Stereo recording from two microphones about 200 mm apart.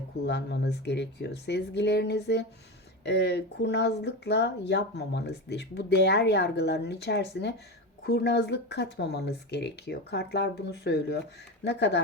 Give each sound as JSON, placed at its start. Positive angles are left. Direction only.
{"t": 0.3, "sound": "speech", "side_deg": 55}